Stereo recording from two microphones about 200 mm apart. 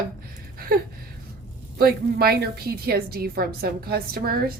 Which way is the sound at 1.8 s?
50° right (ahead or behind).